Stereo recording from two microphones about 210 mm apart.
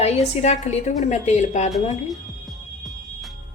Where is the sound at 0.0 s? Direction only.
30° left (ahead or behind).